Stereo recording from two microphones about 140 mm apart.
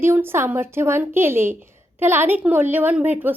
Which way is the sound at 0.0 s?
15° right (ahead or behind).